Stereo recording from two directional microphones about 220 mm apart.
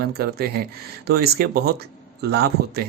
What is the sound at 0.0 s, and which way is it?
Speech, 45° right (ahead or behind).